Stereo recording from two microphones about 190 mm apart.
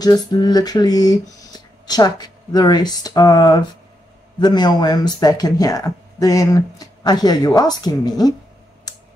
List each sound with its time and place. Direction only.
0.0 s speech: 20° left (ahead or behind)